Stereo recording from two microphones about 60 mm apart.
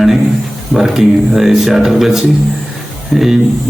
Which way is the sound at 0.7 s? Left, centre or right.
Centre.